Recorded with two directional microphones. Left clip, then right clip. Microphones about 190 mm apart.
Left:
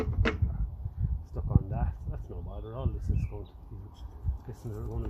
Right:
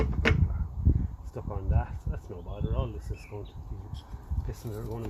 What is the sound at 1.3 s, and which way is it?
Speech, 5° left (ahead or behind).